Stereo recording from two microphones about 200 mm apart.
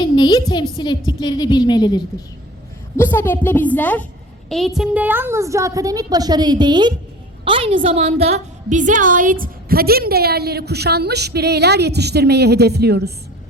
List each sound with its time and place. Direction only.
0.0 s a woman's voice: 20° left (ahead or behind); by 13.1 s 55° right (ahead or behind)